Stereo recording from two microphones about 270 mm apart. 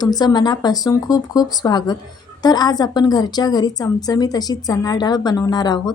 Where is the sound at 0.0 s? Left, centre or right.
Centre.